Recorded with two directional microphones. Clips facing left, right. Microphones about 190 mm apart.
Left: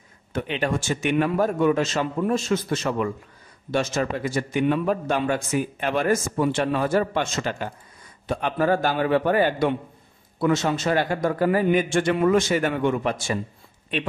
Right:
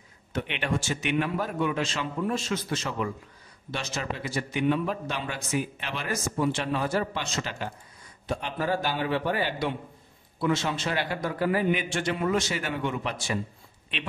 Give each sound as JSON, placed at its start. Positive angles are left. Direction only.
{"t": 0.3, "sound": "a man's voice", "side_deg": 45}